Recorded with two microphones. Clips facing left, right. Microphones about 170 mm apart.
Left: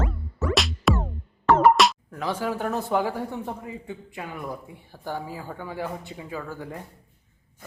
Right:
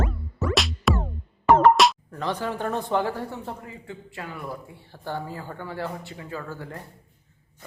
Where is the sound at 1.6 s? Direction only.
Centre (ahead or behind).